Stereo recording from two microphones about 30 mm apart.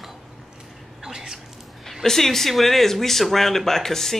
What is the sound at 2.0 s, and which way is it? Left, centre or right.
Speech, centre.